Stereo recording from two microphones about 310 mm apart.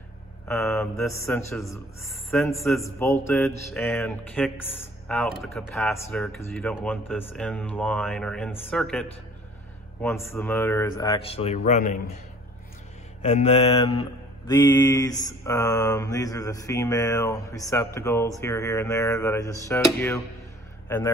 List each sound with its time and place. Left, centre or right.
0.5 s mantra: centre
2.3 s a man's voice: centre
10.0 s mantra: centre
13.2 s speech: centre
14.5 s mantra: centre